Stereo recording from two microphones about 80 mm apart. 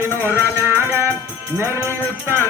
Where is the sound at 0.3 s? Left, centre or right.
Right.